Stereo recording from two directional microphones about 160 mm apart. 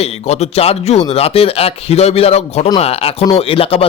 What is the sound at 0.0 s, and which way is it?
A man's voice, 40° left (ahead or behind).